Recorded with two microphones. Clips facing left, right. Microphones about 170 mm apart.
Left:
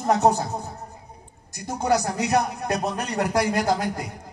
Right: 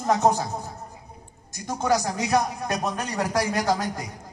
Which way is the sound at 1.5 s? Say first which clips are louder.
Left 1 dB; 60° left (ahead or behind).